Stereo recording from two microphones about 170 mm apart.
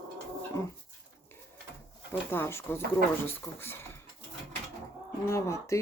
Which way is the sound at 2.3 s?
15° left (ahead or behind).